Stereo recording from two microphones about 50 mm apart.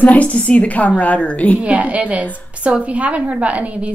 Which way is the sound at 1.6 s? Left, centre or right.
Right.